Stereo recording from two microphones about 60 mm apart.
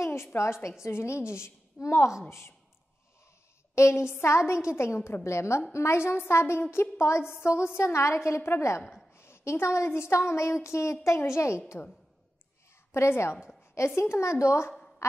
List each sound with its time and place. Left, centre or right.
0.0 s a woman's voice: left
3.7 s a woman's voice: left
8.9 s a sound: left
9.8 s a woman's voice: left
12.9 s a woman's voice: left
14.7 s a sound: centre